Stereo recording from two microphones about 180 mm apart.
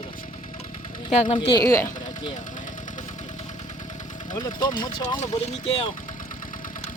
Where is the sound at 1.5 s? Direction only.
20° left (ahead or behind).